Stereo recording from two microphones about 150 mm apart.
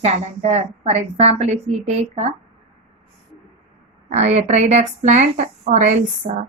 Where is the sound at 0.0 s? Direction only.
45° right (ahead or behind).